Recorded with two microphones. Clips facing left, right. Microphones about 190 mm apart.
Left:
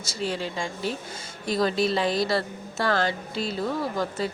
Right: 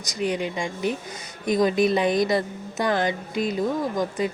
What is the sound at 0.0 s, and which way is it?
Speech, 15° right (ahead or behind).